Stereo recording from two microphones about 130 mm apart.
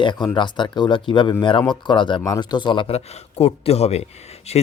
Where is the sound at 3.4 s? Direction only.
50° left (ahead or behind).